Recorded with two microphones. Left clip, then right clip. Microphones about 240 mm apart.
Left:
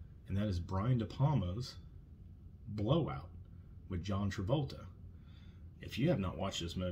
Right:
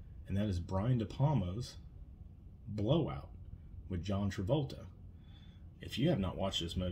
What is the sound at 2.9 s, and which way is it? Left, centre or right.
Speech, centre.